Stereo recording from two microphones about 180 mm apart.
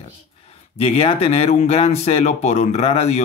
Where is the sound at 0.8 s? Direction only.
35° left (ahead or behind).